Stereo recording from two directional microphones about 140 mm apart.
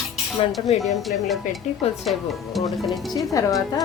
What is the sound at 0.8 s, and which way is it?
Speech, centre (ahead or behind).